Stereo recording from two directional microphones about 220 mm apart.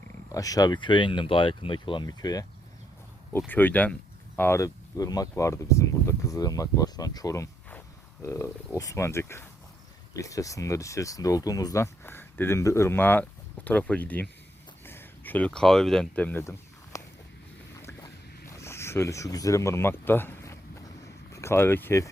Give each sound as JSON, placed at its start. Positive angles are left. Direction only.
{"t": 0.3, "sound": "speech", "side_deg": 15}
{"t": 3.5, "sound": "speech", "side_deg": 10}
{"t": 18.5, "sound": "a sound", "side_deg": 10}
{"t": 21.3, "sound": "speech", "side_deg": 10}